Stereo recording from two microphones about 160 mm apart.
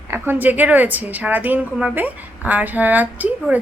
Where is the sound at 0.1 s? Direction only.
10° right (ahead or behind).